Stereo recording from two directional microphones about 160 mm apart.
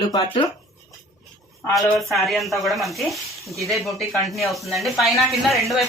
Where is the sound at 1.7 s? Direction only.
Centre (ahead or behind).